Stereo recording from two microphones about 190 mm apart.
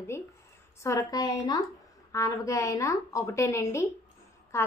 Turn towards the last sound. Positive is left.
turn(degrees=15)  # may be behind; listen again after turning